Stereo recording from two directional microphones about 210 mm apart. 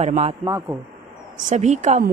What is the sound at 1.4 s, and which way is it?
Speech, 35° right (ahead or behind).